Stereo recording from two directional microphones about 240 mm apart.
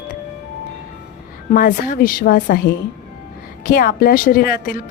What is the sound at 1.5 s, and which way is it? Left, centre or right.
Speech, left.